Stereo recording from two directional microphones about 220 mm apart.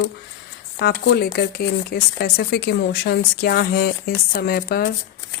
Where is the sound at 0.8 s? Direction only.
50° left (ahead or behind).